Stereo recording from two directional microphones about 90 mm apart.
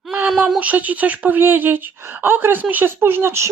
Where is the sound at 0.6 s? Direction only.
15° right (ahead or behind).